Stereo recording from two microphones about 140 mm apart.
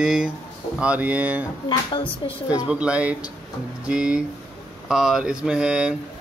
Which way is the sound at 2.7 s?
5° right (ahead or behind).